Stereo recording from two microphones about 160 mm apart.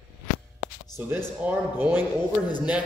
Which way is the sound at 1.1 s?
15° right (ahead or behind).